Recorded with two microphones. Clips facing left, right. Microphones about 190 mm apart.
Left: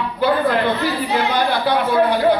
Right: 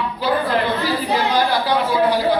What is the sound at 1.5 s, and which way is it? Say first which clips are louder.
Speech: left 1 dB; 55° left (ahead or behind).